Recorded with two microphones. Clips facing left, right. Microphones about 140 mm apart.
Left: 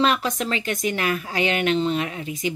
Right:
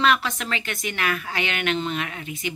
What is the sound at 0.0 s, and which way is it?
A woman's voice, 40° left (ahead or behind).